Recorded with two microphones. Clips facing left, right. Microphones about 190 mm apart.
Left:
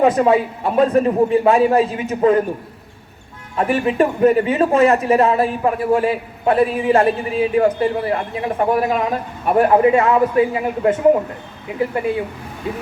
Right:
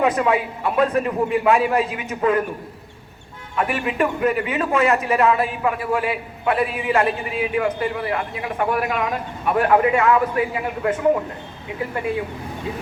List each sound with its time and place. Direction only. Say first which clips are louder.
0.1 s a man's voice: left 5 dB; 35° left (ahead or behind)
3.6 s a man's voice: left 5 dB; 35° left (ahead or behind)